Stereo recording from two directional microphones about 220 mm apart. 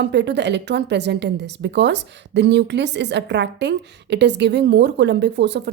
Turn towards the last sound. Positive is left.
turn(degrees=-50)  # may be behind; listen again after turning